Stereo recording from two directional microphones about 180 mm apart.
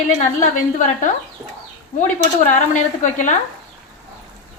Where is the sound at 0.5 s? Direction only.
45° left (ahead or behind).